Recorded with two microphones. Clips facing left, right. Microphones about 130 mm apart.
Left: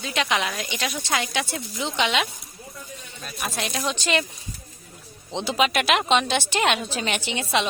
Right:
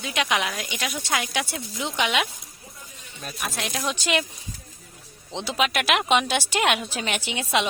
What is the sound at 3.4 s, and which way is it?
Speech, centre (ahead or behind).